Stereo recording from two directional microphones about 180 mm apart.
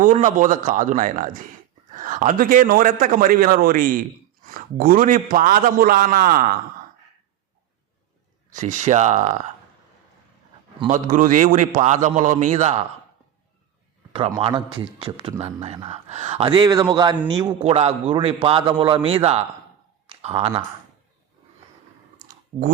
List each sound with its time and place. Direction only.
0.0 s a man's voice: 45° right (ahead or behind)
8.5 s a man's voice: 40° right (ahead or behind)
10.9 s a man's voice: 45° right (ahead or behind)
14.1 s a man's voice: 30° right (ahead or behind)
17.6 s a man's voice: 35° right (ahead or behind)
20.1 s a sound: 30° right (ahead or behind)